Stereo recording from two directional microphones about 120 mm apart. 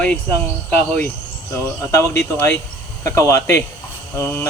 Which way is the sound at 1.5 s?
20° left (ahead or behind).